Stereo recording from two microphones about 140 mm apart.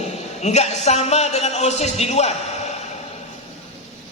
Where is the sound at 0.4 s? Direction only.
50° left (ahead or behind).